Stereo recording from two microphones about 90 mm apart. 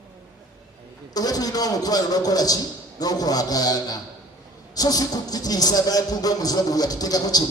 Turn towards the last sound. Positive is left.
turn(degrees=45)  # may be behind; listen again after turning